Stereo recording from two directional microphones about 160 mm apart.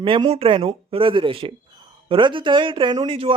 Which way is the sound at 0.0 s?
35° right (ahead or behind).